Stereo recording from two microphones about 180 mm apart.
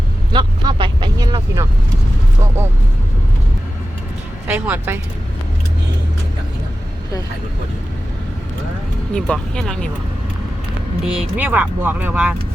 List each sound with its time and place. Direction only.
0.3 s speech: 25° right (ahead or behind)
4.4 s speech: 10° right (ahead or behind)
9.1 s speech: 5° left (ahead or behind)
11.0 s speech: 5° right (ahead or behind)